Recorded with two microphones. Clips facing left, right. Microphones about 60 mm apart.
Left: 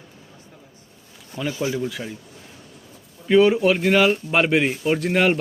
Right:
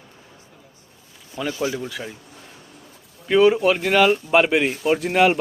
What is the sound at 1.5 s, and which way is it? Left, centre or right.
Speech, centre.